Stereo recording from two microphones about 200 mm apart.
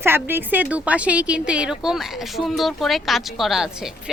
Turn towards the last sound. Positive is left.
turn(degrees=0)  # may be behind; listen again after turning